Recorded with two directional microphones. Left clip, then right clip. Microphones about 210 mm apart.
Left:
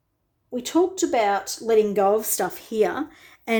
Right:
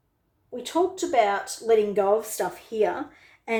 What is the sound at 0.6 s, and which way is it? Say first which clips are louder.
Speech: left 3 dB; 45° left (ahead or behind).